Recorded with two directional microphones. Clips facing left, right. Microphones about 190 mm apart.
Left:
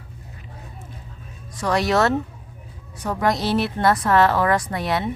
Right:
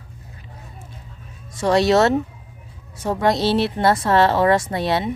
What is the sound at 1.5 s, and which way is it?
Speech, 25° right (ahead or behind).